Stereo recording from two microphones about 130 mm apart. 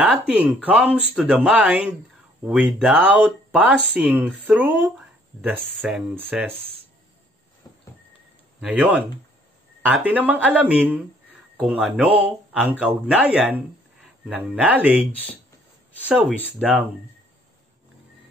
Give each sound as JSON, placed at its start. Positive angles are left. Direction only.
{"t": 0.0, "sound": "speech", "side_deg": -10}
{"t": 7.7, "sound": "horse", "side_deg": 30}
{"t": 8.5, "sound": "speech", "side_deg": -10}
{"t": 16.1, "sound": "speech", "side_deg": -10}